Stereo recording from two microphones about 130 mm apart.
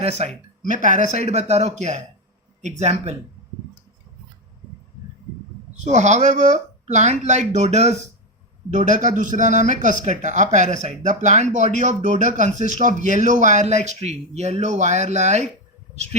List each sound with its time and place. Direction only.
0.0 s speech: 55° right (ahead or behind)
0.6 s speech: 75° right (ahead or behind); by 3.2 s 60° right (ahead or behind)
5.8 s speech: 65° right (ahead or behind)
8.7 s speech: 70° right (ahead or behind)